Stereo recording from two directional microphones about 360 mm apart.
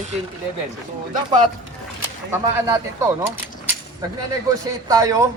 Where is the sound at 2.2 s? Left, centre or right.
Centre.